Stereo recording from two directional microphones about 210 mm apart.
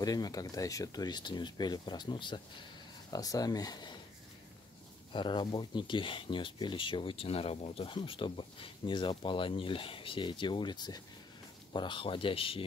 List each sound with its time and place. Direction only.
0.0 s speech: 20° left (ahead or behind)
5.1 s speech: 20° left (ahead or behind)